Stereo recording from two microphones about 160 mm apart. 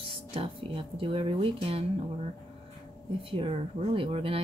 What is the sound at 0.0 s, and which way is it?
Speech, 35° right (ahead or behind).